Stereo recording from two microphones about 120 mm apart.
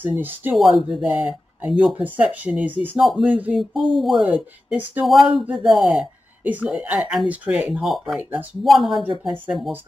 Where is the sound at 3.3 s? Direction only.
10° right (ahead or behind).